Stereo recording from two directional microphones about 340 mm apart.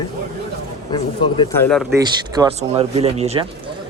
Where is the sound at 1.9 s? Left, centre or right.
Centre.